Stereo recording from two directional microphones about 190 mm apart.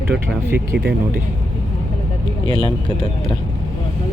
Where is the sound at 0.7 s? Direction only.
55° right (ahead or behind).